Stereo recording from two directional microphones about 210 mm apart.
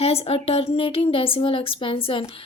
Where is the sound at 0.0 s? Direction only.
30° left (ahead or behind).